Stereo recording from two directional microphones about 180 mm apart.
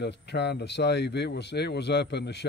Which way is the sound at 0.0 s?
70° left (ahead or behind).